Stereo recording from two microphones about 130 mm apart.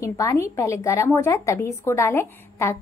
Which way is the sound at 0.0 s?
20° left (ahead or behind).